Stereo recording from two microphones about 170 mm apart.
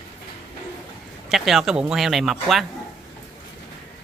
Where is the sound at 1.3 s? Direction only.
Centre (ahead or behind).